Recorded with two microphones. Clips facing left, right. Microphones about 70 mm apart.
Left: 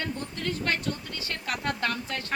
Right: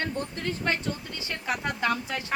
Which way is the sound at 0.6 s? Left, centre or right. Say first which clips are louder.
Right 2 dB; centre.